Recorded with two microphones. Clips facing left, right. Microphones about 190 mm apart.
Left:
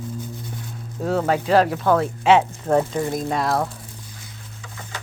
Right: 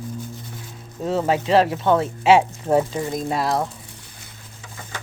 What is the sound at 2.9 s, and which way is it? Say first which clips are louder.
Speech: left 1 dB; centre (ahead or behind).